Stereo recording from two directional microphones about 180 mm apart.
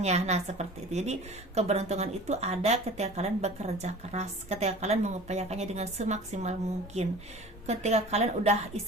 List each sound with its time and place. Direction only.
0.0 s speech: 40° right (ahead or behind)